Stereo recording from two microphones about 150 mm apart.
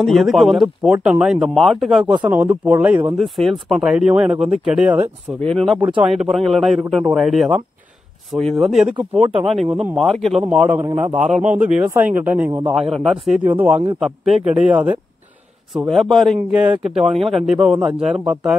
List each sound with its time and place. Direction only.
0.0 s a man's voice: centre (ahead or behind)
3.2 s a man's voice: centre (ahead or behind)
5.4 s a man's voice: 5° left (ahead or behind)
5.8 s speech: 35° right (ahead or behind)
6.0 s a man's voice: 5° right (ahead or behind)
11.4 s speech: 55° right (ahead or behind)
11.9 s speech: 10° right (ahead or behind)
12.7 s a man's voice: centre (ahead or behind)
13.9 s a man's voice: centre (ahead or behind)
15.9 s a man's voice: centre (ahead or behind)